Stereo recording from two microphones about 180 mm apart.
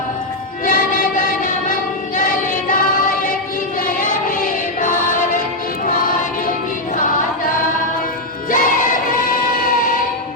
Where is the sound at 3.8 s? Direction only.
50° left (ahead or behind).